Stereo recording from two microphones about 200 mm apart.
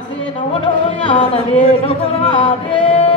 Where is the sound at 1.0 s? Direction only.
30° left (ahead or behind).